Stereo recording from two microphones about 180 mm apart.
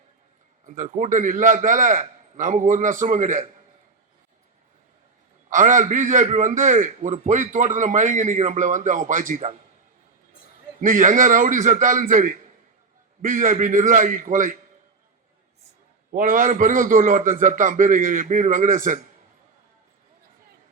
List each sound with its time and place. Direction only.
0.7 s a man's voice: 45° right (ahead or behind)
5.5 s a man's voice: 45° right (ahead or behind)
10.8 s a man's voice: 45° right (ahead or behind)
16.1 s a man's voice: 50° right (ahead or behind)